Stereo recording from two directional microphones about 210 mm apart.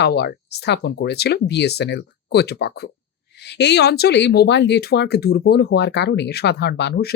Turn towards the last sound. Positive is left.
turn(degrees=50)  # may be behind; listen again after turning